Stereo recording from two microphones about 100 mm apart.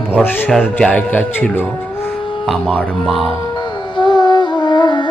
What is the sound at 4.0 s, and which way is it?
Music, 50° left (ahead or behind).